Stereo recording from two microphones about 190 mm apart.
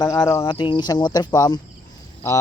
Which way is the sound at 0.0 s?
20° left (ahead or behind).